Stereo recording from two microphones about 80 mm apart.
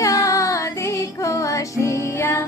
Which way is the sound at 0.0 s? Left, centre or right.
Left.